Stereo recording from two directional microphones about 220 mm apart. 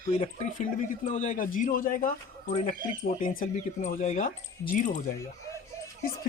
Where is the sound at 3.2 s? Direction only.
40° left (ahead or behind).